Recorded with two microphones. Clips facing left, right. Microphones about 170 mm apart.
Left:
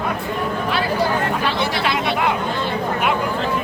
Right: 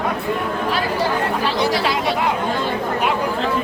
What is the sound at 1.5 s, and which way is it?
Chatter, 40° right (ahead or behind).